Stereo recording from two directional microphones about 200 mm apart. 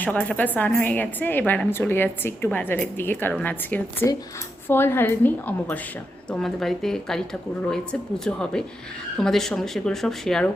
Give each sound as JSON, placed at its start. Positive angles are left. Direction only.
{"t": 0.0, "sound": "a woman's voice", "side_deg": 5}
{"t": 8.2, "sound": "speech", "side_deg": 5}